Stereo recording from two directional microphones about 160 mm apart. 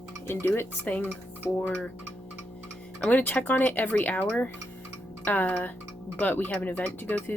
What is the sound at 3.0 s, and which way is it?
Speech, 10° left (ahead or behind).